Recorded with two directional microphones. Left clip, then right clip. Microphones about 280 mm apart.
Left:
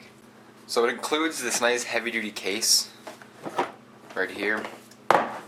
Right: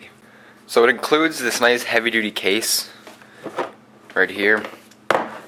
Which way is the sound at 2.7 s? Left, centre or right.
Centre.